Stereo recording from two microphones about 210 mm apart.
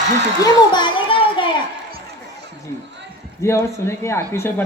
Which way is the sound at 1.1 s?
25° left (ahead or behind).